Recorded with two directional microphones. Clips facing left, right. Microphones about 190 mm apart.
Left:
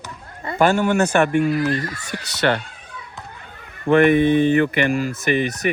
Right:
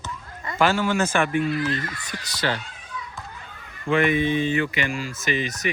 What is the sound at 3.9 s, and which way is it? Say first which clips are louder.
Speech: left 7 dB; 60° left (ahead or behind).